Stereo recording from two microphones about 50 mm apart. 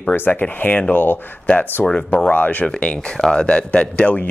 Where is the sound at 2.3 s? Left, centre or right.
Left.